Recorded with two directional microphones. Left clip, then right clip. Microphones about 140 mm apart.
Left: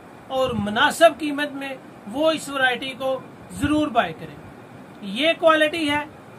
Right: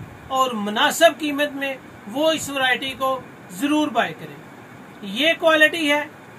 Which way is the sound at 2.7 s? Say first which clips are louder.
Right 4 dB; 35° left (ahead or behind).